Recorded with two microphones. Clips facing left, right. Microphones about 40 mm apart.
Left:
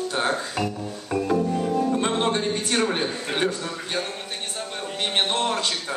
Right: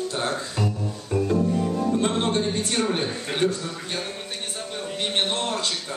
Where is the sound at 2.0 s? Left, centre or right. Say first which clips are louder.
Even; left.